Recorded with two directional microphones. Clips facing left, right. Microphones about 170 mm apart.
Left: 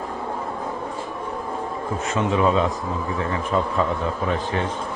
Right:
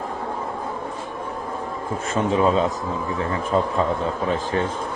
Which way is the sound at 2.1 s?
35° right (ahead or behind).